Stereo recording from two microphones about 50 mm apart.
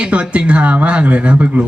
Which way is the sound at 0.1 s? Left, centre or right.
Right.